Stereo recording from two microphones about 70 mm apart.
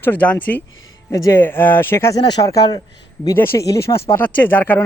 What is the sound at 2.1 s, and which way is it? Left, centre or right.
Speech, left.